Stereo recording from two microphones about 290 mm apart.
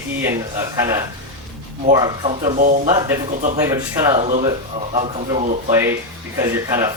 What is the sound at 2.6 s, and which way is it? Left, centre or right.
Speech, right.